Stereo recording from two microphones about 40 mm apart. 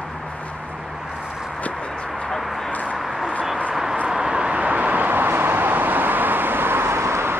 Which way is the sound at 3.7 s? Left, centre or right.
Centre.